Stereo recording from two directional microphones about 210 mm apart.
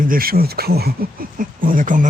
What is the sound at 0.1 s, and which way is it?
Speech, 45° right (ahead or behind).